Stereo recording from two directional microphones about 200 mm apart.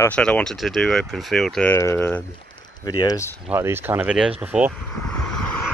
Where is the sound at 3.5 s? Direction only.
10° right (ahead or behind).